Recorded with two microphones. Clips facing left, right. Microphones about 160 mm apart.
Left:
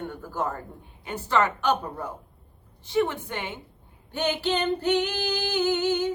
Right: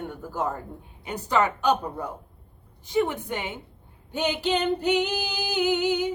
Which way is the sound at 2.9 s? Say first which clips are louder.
Even; 15° right (ahead or behind).